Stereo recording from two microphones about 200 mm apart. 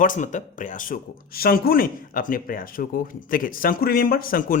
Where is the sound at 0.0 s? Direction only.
40° left (ahead or behind).